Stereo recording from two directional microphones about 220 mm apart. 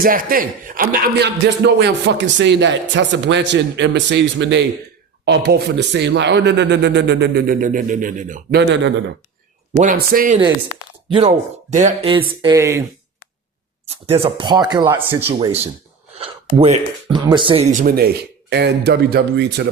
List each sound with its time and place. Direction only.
0.0 s a man's voice: 40° right (ahead or behind)
9.7 s speech: 40° right (ahead or behind); by 12.8 s 10° right (ahead or behind)
13.8 s a man's voice: 25° right (ahead or behind); by 19.6 s 50° right (ahead or behind)